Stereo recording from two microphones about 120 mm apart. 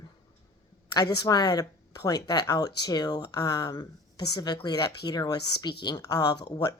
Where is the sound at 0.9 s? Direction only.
35° left (ahead or behind).